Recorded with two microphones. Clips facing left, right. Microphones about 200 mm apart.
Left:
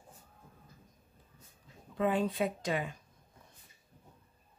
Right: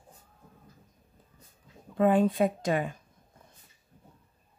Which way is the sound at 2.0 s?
50° right (ahead or behind).